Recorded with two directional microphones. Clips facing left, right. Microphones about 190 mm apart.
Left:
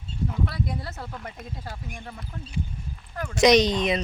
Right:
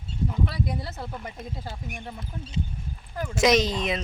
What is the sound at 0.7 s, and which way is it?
Speech, 5° right (ahead or behind).